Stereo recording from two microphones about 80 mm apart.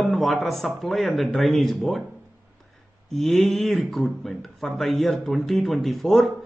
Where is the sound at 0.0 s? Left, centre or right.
Centre.